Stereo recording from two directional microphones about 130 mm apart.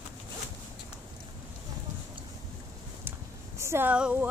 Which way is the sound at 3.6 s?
20° right (ahead or behind).